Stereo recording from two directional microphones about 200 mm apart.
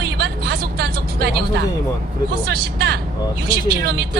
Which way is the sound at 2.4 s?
55° right (ahead or behind).